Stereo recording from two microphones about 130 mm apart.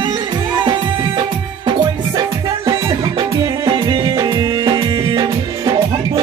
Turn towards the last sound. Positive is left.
turn(degrees=-35)  # may be behind; listen again after turning